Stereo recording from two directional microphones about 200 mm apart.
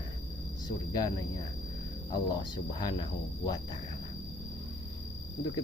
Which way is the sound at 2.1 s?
20° left (ahead or behind).